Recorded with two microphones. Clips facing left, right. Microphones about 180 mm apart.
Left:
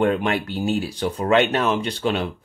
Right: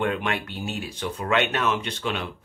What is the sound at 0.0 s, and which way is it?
Speech, 35° left (ahead or behind).